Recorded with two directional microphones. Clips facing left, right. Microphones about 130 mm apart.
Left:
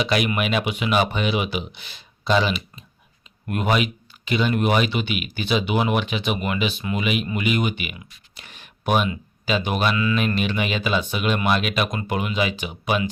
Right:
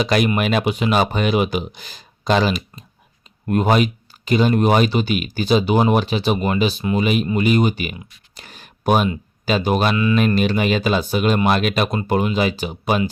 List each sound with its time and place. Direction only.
0.0 s speech: 40° right (ahead or behind)